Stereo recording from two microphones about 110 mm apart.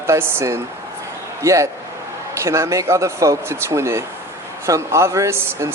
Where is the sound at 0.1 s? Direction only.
25° right (ahead or behind).